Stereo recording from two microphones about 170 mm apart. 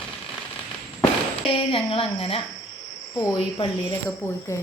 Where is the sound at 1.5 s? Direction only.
35° left (ahead or behind).